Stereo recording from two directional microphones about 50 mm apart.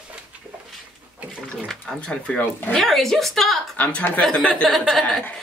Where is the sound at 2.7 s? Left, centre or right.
Centre.